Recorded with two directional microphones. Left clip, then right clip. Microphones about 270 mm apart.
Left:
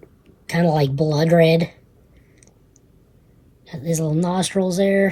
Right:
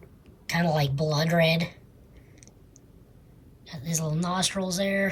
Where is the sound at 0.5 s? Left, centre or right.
Centre.